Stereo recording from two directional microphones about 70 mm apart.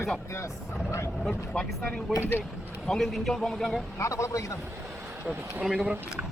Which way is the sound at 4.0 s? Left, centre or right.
Left.